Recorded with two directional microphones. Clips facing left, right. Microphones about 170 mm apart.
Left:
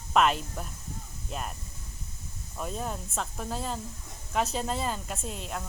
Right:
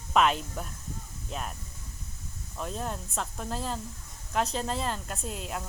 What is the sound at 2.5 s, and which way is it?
Speech, 5° left (ahead or behind).